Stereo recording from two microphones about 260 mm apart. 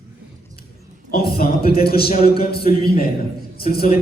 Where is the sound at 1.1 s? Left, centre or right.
Left.